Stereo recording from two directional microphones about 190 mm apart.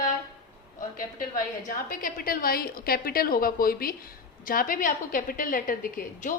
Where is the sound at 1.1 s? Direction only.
45° left (ahead or behind).